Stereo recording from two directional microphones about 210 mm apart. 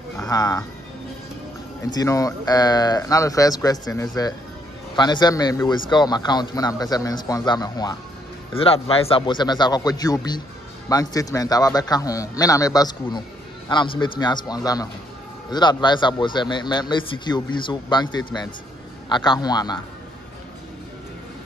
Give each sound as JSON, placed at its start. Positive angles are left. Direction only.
{"t": 0.2, "sound": "speech", "side_deg": 15}
{"t": 1.9, "sound": "a man's voice", "side_deg": 15}